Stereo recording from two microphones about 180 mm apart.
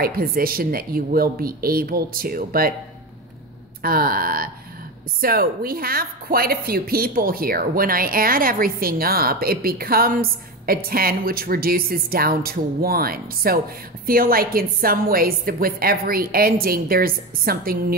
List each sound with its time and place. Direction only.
0.0 s a woman's voice: 55° right (ahead or behind)
3.8 s a woman's voice: 55° right (ahead or behind)